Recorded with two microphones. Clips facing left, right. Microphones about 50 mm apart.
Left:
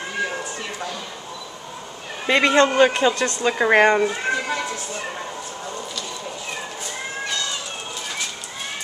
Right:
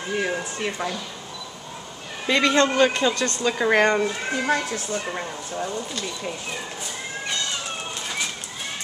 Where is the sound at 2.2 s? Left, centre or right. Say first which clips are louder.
Left 3 dB; centre.